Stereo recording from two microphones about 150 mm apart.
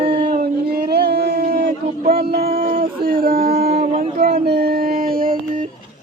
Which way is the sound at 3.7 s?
45° right (ahead or behind).